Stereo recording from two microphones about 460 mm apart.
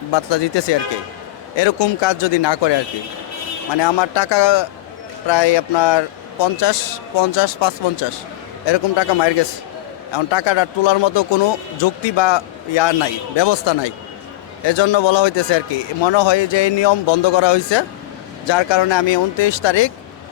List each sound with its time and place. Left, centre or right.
0.1 s speech: left
3.8 s a man's voice: left